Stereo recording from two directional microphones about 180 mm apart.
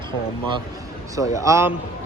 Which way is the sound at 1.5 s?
15° right (ahead or behind).